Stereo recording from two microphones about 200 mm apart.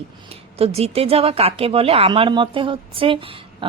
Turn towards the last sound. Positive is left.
turn(degrees=-25)  # may be behind; listen again after turning